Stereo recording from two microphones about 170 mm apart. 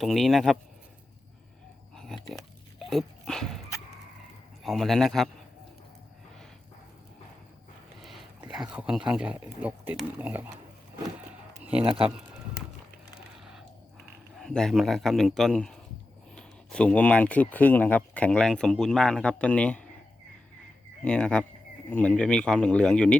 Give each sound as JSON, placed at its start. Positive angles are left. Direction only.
{"t": 0.0, "sound": "speech", "side_deg": 0}
{"t": 2.1, "sound": "a sound", "side_deg": 0}
{"t": 2.7, "sound": "dog", "side_deg": 0}
{"t": 4.6, "sound": "speech", "side_deg": 0}
{"t": 8.0, "sound": "speech", "side_deg": -5}
{"t": 11.6, "sound": "a sound", "side_deg": -10}
{"t": 11.9, "sound": "speech", "side_deg": -30}
{"t": 14.3, "sound": "speech", "side_deg": 0}
{"t": 21.0, "sound": "speech", "side_deg": 5}